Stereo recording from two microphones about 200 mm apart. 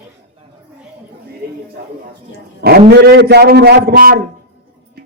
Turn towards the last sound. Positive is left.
turn(degrees=-50)  # may be behind; listen again after turning